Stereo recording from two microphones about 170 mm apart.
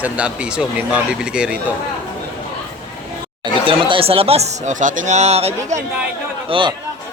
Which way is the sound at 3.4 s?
30° right (ahead or behind).